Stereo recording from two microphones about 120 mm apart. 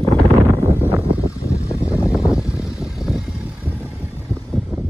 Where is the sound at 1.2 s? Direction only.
25° left (ahead or behind).